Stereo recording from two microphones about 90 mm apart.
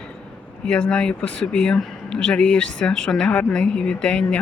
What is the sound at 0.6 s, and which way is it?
Speech, 10° left (ahead or behind).